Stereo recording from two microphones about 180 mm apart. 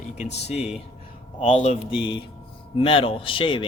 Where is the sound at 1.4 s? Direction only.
40° left (ahead or behind).